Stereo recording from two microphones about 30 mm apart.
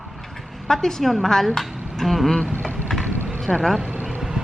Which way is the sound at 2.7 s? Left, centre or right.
Centre.